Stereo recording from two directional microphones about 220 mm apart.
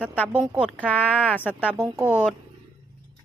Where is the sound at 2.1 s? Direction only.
5° right (ahead or behind).